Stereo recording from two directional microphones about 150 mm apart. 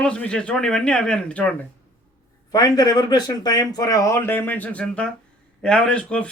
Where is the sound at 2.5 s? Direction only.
25° left (ahead or behind).